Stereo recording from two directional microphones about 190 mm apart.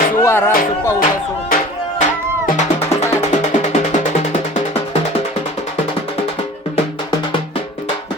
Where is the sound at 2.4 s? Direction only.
40° left (ahead or behind).